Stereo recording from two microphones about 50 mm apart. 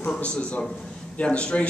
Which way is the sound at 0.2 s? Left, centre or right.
Left.